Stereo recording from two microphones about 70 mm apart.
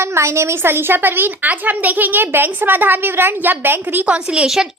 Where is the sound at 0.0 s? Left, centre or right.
Right.